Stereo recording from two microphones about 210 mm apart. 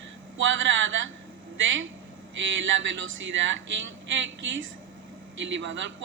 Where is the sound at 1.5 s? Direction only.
65° right (ahead or behind).